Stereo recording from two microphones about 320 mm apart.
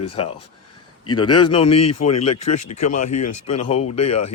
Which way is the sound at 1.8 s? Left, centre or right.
Left.